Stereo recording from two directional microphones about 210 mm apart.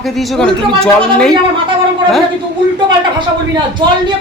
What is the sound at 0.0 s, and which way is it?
Speech, centre (ahead or behind).